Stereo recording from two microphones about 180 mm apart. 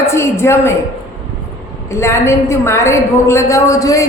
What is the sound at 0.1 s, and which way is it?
Speech, 15° left (ahead or behind).